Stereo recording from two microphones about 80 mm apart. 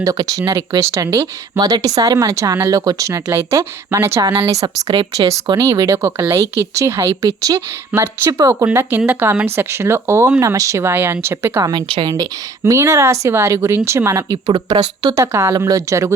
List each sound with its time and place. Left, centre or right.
0.0 s speech: right
1.5 s speech: right
3.3 s speech: right
4.9 s speech: right
5.6 s speech: right
7.3 s speech: right
7.9 s speech: right
8.7 s speech: right
12.1 s speech: right
14.5 s speech: right
15.1 s speech: right
15.5 s speech: right